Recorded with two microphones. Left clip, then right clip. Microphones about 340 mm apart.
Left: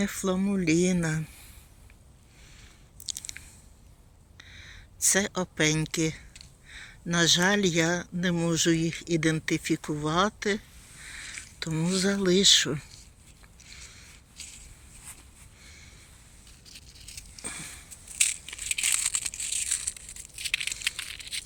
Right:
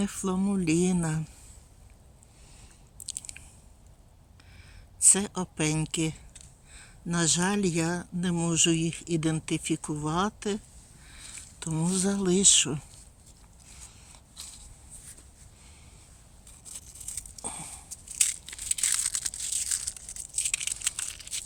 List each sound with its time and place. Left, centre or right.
0.0 s speech: centre
3.1 s chewing: centre
4.9 s speech: centre
13.7 s walk: centre
15.6 s a sound: centre
18.2 s crushing: centre